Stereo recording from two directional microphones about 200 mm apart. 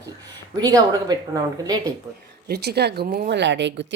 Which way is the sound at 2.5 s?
55° right (ahead or behind).